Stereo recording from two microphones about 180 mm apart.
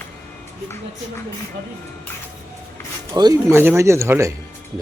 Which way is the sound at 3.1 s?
25° right (ahead or behind).